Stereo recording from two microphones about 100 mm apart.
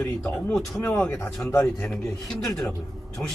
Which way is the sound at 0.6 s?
25° left (ahead or behind).